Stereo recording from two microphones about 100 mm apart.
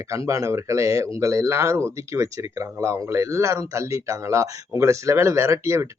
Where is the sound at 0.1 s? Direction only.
35° right (ahead or behind).